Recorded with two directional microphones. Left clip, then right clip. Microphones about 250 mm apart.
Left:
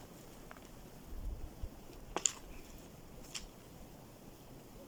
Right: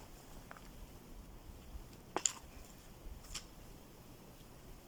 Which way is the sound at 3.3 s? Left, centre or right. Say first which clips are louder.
Left 1 dB; centre.